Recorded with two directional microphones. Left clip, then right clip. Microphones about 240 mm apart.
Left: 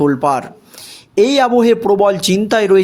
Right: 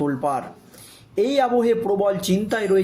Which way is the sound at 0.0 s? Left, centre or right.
Left.